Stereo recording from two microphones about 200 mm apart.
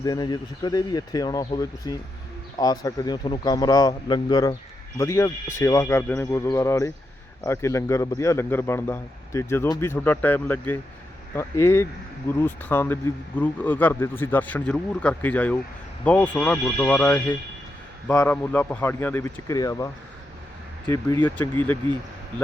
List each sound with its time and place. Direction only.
0.0 s a man's voice: 20° left (ahead or behind)